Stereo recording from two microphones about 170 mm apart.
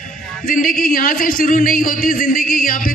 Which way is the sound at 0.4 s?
55° left (ahead or behind).